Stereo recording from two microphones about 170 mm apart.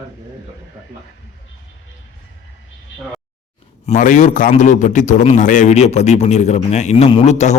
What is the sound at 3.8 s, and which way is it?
A man's voice, 45° left (ahead or behind).